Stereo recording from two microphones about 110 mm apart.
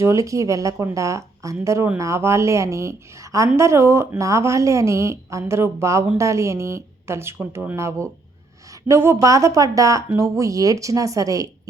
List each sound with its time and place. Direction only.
0.0 s a woman's voice: 30° right (ahead or behind)